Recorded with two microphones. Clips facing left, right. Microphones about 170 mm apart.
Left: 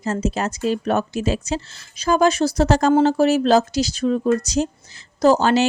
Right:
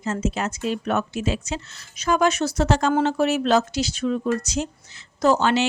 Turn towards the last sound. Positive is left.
turn(degrees=40)  # may be behind; listen again after turning